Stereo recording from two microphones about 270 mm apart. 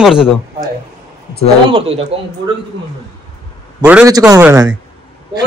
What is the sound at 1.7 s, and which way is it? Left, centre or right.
Speech, right.